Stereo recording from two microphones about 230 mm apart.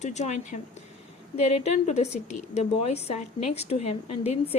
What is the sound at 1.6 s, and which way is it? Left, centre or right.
Speech, left.